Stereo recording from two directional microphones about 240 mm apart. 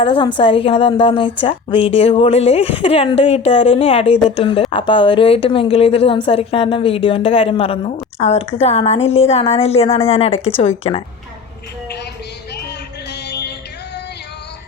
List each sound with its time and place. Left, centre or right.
0.0 s a woman's voice: left
13.1 s music: left